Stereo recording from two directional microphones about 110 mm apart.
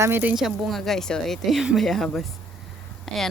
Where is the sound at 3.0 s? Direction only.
5° left (ahead or behind).